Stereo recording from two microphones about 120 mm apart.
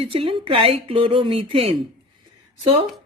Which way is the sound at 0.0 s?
50° right (ahead or behind).